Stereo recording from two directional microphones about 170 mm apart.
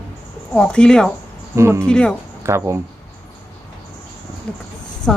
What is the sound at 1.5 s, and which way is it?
Speech, 15° right (ahead or behind).